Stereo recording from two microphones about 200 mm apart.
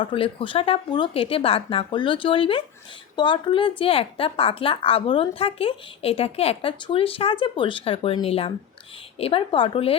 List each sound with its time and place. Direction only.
0.0 s a woman's voice: 25° left (ahead or behind)